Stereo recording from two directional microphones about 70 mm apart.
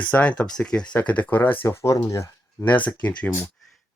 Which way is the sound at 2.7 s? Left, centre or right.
Left.